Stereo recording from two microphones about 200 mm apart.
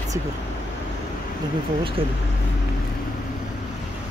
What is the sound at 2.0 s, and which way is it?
Speech, 25° right (ahead or behind).